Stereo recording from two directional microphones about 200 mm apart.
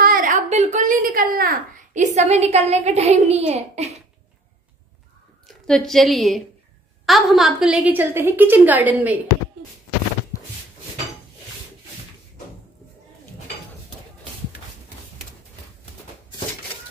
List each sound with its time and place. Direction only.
0.0 s speech: 45° right (ahead or behind)
5.5 s a woman's voice: centre (ahead or behind)